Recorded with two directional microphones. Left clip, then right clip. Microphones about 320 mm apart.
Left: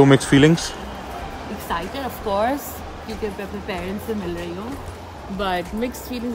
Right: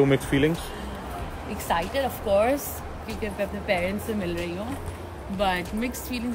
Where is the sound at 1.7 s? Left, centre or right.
Centre.